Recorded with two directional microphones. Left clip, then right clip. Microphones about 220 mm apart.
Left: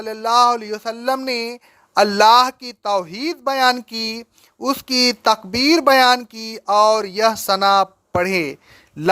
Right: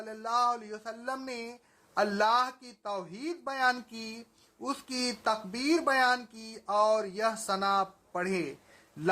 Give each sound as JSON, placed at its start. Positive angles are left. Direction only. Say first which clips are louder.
{"t": 0.0, "sound": "speech", "louder": "left 14 dB", "side_deg": 40}